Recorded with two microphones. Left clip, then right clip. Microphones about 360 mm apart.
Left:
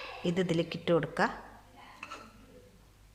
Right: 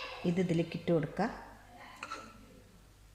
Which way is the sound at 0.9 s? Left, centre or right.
Left.